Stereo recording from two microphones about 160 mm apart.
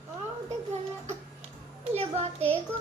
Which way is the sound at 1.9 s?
40° right (ahead or behind).